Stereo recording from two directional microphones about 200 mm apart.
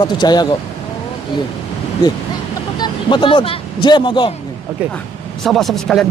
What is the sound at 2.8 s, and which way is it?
Speech, 25° left (ahead or behind).